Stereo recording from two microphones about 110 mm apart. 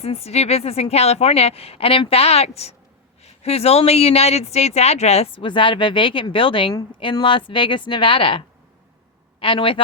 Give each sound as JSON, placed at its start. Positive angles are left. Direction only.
{"t": 0.0, "sound": "speech", "side_deg": 65}